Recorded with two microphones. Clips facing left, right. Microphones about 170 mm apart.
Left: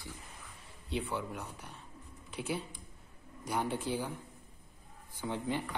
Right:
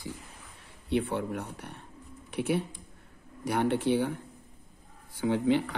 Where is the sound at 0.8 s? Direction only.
65° right (ahead or behind).